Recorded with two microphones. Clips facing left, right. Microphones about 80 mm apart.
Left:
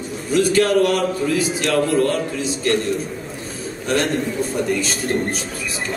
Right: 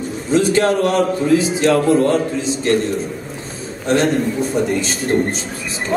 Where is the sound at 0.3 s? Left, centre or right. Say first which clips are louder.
Right 1 dB; right.